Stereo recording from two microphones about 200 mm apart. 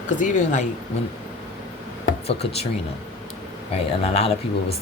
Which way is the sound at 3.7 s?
30° left (ahead or behind).